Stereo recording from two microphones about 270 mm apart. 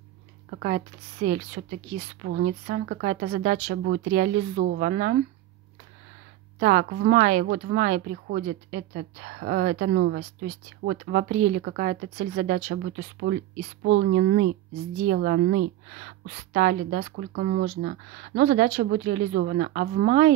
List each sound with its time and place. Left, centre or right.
0.5 s speech: right
2.2 s a woman's voice: right
6.6 s a woman's voice: right